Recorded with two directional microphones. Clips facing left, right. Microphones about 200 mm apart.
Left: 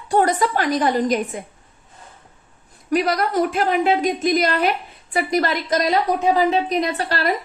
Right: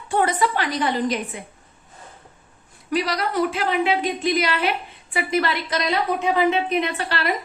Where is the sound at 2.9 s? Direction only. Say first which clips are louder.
Left 4 dB; 50° left (ahead or behind).